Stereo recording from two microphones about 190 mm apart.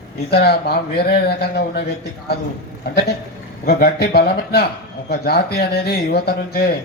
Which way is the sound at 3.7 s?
55° left (ahead or behind).